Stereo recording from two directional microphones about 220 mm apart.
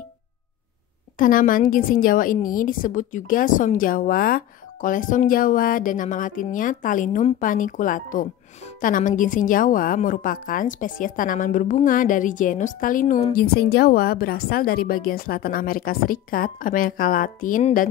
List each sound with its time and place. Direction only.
1.1 s a woman's voice: 40° left (ahead or behind)